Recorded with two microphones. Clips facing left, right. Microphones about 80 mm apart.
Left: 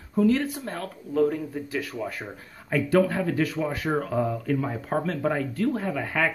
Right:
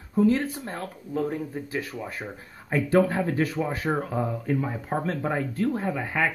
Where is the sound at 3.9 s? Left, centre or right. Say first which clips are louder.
Left 4 dB; centre.